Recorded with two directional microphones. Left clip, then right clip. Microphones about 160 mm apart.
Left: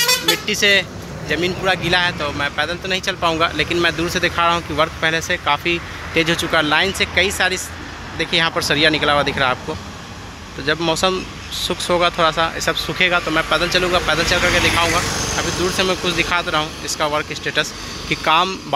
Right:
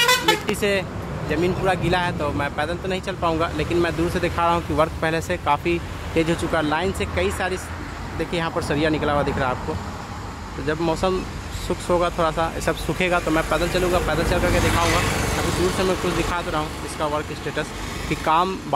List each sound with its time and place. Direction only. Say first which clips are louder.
0.6 s speech: left 7 dB; 10° right (ahead or behind)
10.7 s speech: left 5 dB; centre (ahead or behind)
12.5 s speech: left 5 dB; 15° right (ahead or behind)
14.9 s speech: left 2 dB; 45° left (ahead or behind)
15.6 s speech: left 4 dB; centre (ahead or behind)